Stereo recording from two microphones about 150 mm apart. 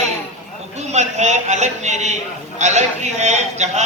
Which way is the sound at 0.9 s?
50° right (ahead or behind).